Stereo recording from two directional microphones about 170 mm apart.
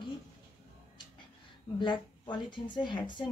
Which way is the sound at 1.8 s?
25° left (ahead or behind).